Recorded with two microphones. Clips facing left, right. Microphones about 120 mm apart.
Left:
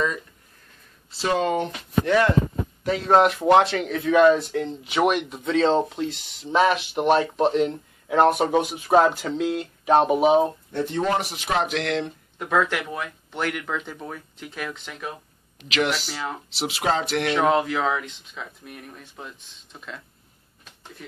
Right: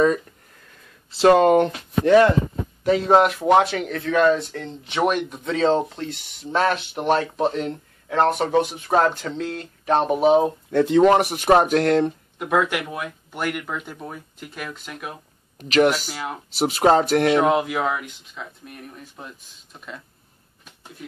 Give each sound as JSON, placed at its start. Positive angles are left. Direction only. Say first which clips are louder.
{"t": 1.1, "sound": "speech", "louder": "right 9 dB", "side_deg": -65}
{"t": 2.9, "sound": "speech", "louder": "right 2 dB", "side_deg": 0}
{"t": 10.8, "sound": "speech", "louder": "right 9 dB", "side_deg": -80}
{"t": 12.4, "sound": "speech", "louder": "right 1 dB", "side_deg": -10}
{"t": 15.7, "sound": "speech", "louder": "right 7 dB", "side_deg": -45}
{"t": 16.1, "sound": "speech", "louder": "even", "side_deg": -10}
{"t": 16.5, "sound": "speech", "louder": "right 8 dB", "side_deg": -45}
{"t": 17.4, "sound": "speech", "louder": "right 1 dB", "side_deg": -5}